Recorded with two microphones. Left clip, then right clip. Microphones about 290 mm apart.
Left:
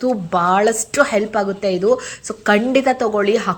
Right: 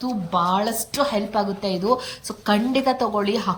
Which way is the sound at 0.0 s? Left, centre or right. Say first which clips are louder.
Left 5 dB; centre.